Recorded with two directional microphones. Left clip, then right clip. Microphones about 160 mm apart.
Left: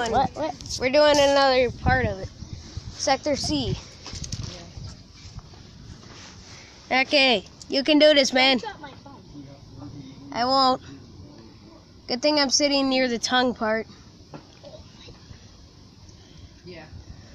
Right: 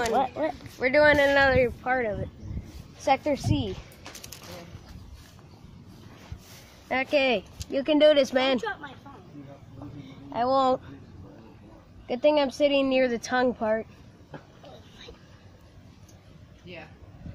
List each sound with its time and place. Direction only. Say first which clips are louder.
0.0 s speech: left 2 dB; centre (ahead or behind)
0.7 s speech: left 2 dB; 20° left (ahead or behind)
3.4 s speech: left 3 dB; 20° left (ahead or behind)
6.9 s speech: left 4 dB; 20° left (ahead or behind)
10.4 s speech: left 3 dB; 10° left (ahead or behind)
12.1 s speech: left 1 dB; 5° left (ahead or behind)